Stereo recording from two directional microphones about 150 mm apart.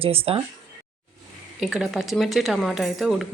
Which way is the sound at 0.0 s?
40° right (ahead or behind).